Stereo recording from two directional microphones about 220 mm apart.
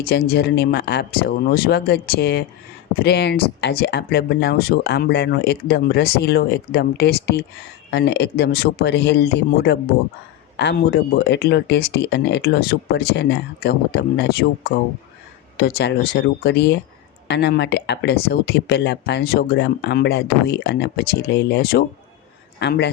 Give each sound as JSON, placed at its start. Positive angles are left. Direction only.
{"t": 0.0, "sound": "speech", "side_deg": 45}